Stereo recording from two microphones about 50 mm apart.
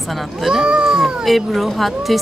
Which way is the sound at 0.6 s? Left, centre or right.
Centre.